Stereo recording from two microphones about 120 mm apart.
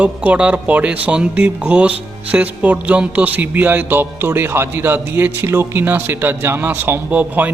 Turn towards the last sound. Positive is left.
turn(degrees=-15)  # may be behind; listen again after turning